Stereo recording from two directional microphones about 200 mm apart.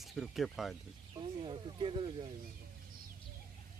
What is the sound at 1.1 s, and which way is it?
Snake, 25° right (ahead or behind).